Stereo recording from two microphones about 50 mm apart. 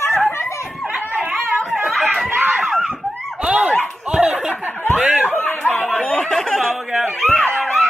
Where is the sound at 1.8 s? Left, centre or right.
Centre.